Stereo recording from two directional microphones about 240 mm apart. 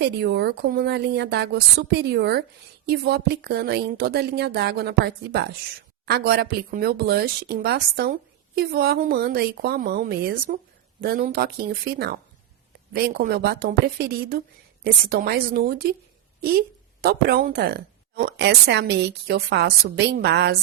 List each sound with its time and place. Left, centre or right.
0.0 s a woman's voice: right